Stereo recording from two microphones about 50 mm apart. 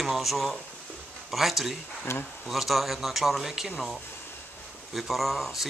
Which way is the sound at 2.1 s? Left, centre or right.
Left.